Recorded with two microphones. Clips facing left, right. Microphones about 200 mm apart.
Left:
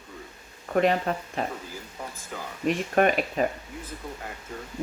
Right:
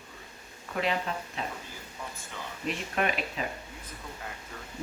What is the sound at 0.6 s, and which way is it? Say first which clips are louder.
Speech: left 8 dB; 45° left (ahead or behind).